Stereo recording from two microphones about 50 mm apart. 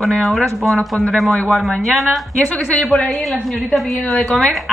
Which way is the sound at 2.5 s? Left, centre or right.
Left.